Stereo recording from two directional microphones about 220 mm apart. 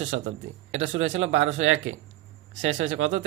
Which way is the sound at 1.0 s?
60° right (ahead or behind).